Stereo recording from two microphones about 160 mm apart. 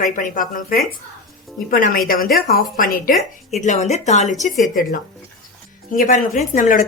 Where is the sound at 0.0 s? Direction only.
55° left (ahead or behind).